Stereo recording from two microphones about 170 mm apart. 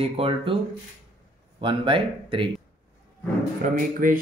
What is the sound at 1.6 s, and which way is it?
Speech, 30° right (ahead or behind).